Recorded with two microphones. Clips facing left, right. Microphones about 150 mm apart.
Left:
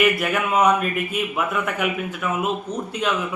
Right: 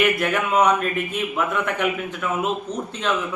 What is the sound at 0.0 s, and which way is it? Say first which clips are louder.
A man's voice: even; 5° left (ahead or behind).